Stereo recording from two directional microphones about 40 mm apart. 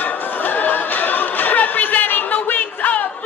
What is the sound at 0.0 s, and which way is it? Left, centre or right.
Music, left.